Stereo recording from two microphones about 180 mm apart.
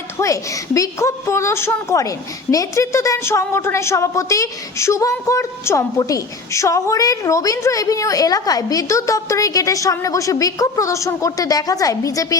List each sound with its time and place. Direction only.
0.2 s a woman's voice: 20° left (ahead or behind)